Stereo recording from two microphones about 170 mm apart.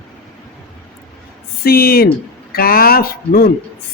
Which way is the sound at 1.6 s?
60° left (ahead or behind).